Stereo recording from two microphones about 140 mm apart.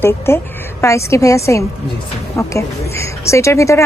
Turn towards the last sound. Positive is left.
turn(degrees=20)  # may be behind; listen again after turning